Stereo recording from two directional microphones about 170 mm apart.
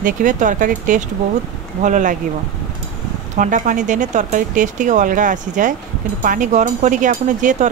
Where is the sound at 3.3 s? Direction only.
50° right (ahead or behind).